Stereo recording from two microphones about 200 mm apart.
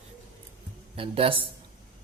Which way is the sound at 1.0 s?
30° right (ahead or behind).